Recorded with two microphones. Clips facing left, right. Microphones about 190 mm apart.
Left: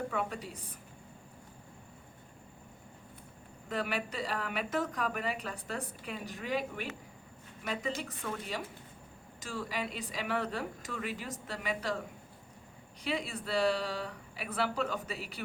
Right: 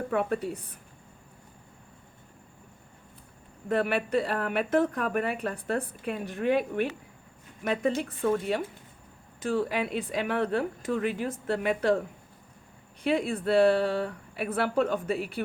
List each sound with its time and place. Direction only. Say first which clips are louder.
0.1 s a woman's voice: right 9 dB; 60° right (ahead or behind)
3.7 s a woman's voice: right 9 dB; 60° right (ahead or behind)